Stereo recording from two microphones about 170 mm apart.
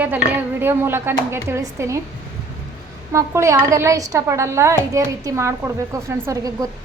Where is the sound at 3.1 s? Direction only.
15° right (ahead or behind).